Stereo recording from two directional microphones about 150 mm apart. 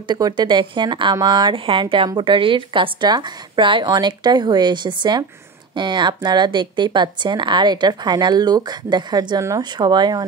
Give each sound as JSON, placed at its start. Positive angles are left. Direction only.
{"t": 0.1, "sound": "a woman's voice", "side_deg": -30}